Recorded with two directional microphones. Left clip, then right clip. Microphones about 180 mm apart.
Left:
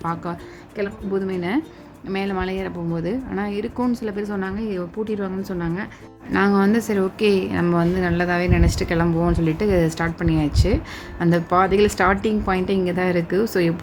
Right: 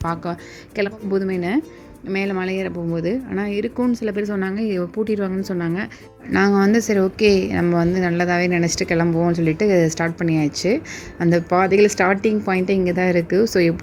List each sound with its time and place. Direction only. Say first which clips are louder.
0.0 s a woman's voice: right 2 dB; 30° right (ahead or behind)